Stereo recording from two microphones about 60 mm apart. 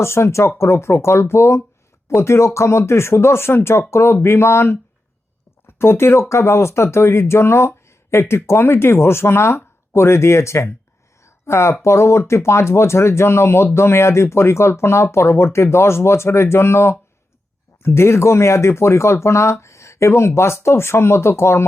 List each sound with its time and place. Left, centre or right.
0.0 s speech: left
11.2 s a sound: left
11.8 s speech: left